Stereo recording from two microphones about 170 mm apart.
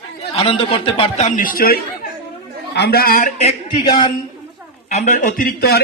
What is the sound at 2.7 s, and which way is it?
Speech, 75° left (ahead or behind).